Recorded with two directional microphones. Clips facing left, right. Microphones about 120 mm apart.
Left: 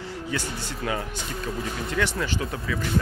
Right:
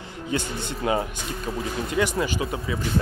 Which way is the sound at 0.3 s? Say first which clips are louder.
Right 5 dB; 25° right (ahead or behind).